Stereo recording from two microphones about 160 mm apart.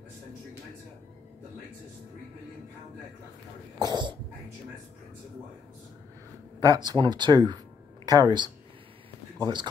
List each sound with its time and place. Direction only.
3.8 s cough: 30° right (ahead or behind)
6.6 s speech: 25° right (ahead or behind)
9.4 s cough: 30° right (ahead or behind)